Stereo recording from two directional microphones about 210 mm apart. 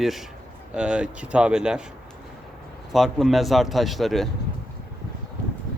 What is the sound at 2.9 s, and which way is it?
Speech, centre (ahead or behind).